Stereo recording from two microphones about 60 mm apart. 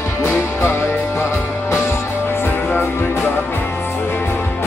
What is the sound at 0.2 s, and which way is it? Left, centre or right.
Music, left.